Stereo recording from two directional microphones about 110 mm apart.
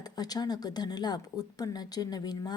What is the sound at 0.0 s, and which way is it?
Speech, 35° left (ahead or behind).